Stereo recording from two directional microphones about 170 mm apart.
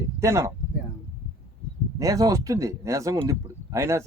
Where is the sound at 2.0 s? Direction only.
20° right (ahead or behind).